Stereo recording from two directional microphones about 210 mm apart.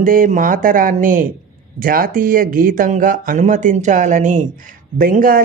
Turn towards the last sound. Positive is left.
turn(degrees=-40)  # may be behind; listen again after turning